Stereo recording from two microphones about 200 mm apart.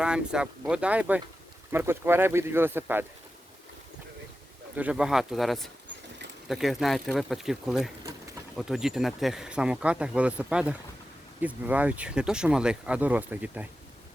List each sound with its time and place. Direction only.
0.0 s speech: 5° right (ahead or behind)
4.8 s speech: 5° right (ahead or behind)